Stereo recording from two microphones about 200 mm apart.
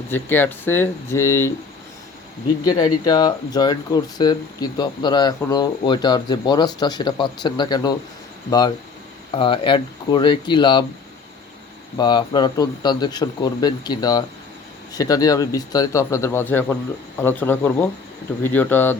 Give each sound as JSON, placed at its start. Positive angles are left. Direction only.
{"t": 0.1, "sound": "speech", "side_deg": 10}
{"t": 3.0, "sound": "speech", "side_deg": 20}
{"t": 11.9, "sound": "speech", "side_deg": 20}